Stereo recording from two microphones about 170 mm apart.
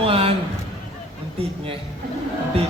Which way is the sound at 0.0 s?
35° right (ahead or behind).